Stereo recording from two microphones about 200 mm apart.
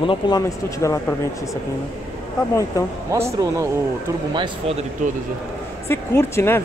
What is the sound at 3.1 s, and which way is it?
Speech, 15° right (ahead or behind).